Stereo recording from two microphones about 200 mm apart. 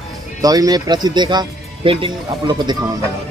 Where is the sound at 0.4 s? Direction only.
20° right (ahead or behind).